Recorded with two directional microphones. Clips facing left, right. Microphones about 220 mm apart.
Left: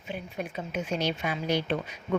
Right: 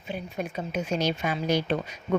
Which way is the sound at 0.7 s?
40° right (ahead or behind).